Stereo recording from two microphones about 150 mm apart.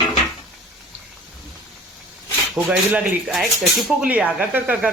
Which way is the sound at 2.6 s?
5° right (ahead or behind).